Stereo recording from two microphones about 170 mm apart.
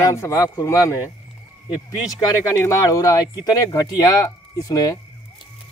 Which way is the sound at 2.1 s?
20° left (ahead or behind).